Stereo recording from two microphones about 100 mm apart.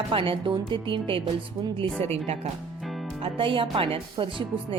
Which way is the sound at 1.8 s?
80° right.